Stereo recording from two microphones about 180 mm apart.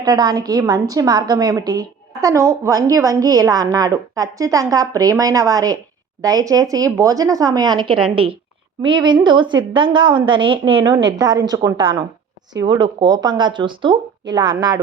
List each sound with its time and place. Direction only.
0.0 s a woman's voice: 20° right (ahead or behind)